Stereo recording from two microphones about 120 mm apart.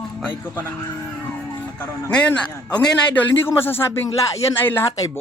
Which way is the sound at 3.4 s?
20° left (ahead or behind).